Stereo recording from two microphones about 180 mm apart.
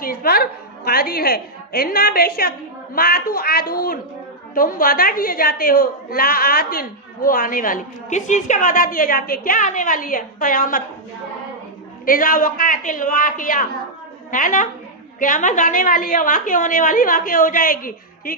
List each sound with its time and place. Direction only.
0.0 s music: 55° left (ahead or behind)
0.9 s a woman's voice: 55° left (ahead or behind)
12.0 s a woman's voice: 50° left (ahead or behind)